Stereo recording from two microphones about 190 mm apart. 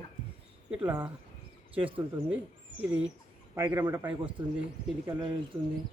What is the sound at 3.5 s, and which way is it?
Speech, 10° right (ahead or behind).